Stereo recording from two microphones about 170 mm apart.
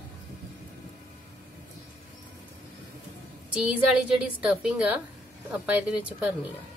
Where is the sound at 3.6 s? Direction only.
5° right (ahead or behind).